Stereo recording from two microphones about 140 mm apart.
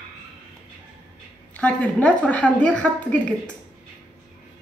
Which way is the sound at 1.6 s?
10° left (ahead or behind).